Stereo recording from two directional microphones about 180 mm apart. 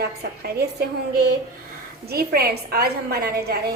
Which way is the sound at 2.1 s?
60° right (ahead or behind).